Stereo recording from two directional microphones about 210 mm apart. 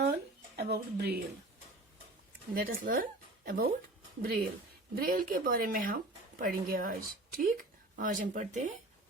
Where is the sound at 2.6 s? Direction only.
40° right (ahead or behind).